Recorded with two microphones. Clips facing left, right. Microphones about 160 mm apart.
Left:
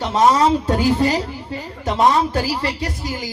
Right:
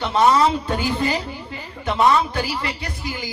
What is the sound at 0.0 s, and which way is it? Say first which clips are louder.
A man's voice: left 1 dB; 40° left (ahead or behind).